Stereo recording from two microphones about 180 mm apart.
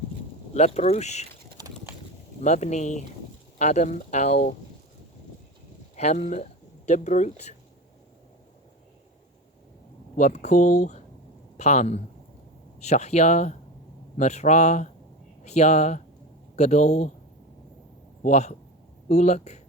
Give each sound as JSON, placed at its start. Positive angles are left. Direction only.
{"t": 0.5, "sound": "speech", "side_deg": 35}
{"t": 1.6, "sound": "horse", "side_deg": -20}
{"t": 2.4, "sound": "speech", "side_deg": 40}
{"t": 6.0, "sound": "speech", "side_deg": 40}
{"t": 10.2, "sound": "speech", "side_deg": 40}
{"t": 18.2, "sound": "a man's voice", "side_deg": 40}